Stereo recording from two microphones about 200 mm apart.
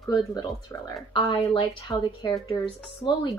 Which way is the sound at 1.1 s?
25° left (ahead or behind).